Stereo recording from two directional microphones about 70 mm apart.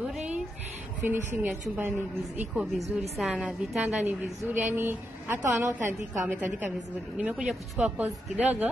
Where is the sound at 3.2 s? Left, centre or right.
Centre.